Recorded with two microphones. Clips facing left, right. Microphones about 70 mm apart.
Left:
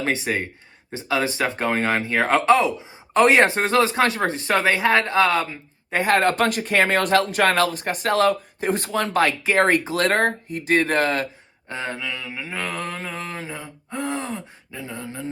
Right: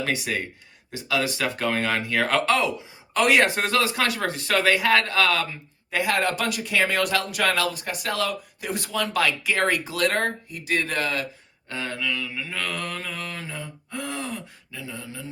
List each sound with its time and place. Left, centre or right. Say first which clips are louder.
0.0 s speech: left 3 dB; left
6.0 s speech: left 5 dB; left
11.7 s speech: even; left